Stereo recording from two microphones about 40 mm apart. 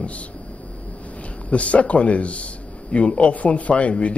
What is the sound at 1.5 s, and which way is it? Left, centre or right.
A man's voice, left.